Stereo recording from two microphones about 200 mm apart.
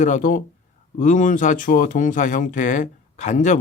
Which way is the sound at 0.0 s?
40° left (ahead or behind).